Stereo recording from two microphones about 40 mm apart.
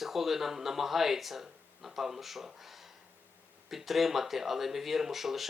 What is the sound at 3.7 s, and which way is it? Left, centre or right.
Speech, centre.